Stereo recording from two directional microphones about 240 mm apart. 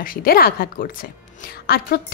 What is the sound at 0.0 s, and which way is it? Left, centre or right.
A woman's voice, left.